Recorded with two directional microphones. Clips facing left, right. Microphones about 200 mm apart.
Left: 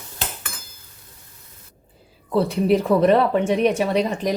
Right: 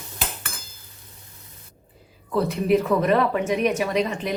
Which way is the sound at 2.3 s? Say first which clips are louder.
Left 2 dB; 30° left (ahead or behind).